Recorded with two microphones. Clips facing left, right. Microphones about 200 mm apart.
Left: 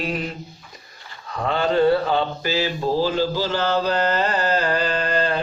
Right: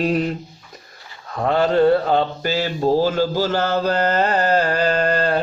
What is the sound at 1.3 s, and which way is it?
Mantra, 45° right (ahead or behind).